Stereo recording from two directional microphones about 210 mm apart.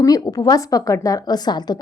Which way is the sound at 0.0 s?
15° left (ahead or behind).